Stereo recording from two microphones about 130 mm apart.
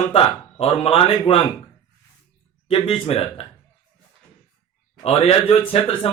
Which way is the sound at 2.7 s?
50° left (ahead or behind).